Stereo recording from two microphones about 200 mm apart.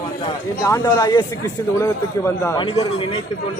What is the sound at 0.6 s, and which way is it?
Speech, 15° left (ahead or behind).